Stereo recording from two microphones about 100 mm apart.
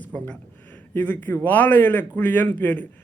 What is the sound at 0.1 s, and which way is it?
A man's voice, 20° left (ahead or behind).